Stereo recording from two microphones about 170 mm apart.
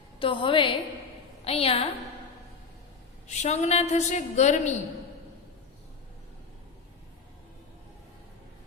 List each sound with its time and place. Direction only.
0.2 s a woman's voice: 30° left (ahead or behind)
3.2 s a woman's voice: 40° left (ahead or behind)